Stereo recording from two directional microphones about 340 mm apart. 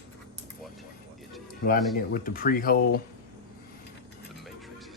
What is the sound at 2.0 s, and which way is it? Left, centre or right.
Speech, left.